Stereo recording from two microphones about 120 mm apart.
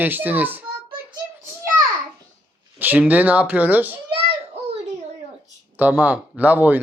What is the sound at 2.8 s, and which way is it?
Speech, 15° right (ahead or behind).